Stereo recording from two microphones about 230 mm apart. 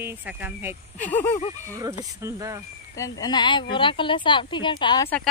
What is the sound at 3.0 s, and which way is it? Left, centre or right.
Speech, centre.